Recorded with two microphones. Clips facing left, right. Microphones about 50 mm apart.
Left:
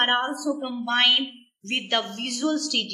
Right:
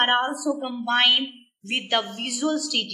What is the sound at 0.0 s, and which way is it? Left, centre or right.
A woman's voice, centre.